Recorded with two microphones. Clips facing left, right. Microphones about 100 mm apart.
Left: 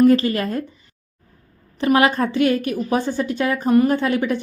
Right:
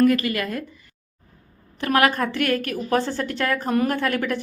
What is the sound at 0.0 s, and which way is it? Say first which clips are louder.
Speech: left 4 dB; 30° left (ahead or behind).